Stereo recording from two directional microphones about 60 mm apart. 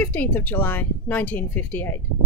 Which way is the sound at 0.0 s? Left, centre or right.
Left.